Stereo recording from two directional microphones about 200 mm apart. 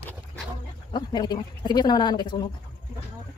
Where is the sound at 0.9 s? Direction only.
20° left (ahead or behind).